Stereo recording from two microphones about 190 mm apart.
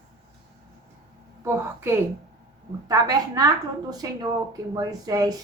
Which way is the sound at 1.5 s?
10° right (ahead or behind).